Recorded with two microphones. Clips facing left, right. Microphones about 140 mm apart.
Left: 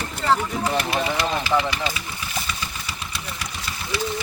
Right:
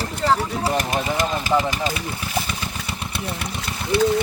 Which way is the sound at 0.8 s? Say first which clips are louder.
Right 1 dB; 45° right (ahead or behind).